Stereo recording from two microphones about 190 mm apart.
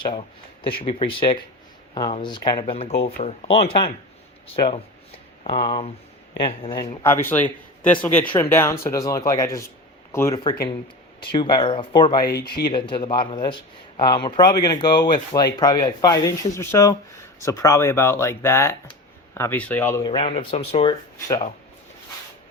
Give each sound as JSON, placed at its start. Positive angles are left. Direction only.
{"t": 0.0, "sound": "speech", "side_deg": 25}
{"t": 7.0, "sound": "speech", "side_deg": 10}
{"t": 20.1, "sound": "speech", "side_deg": 30}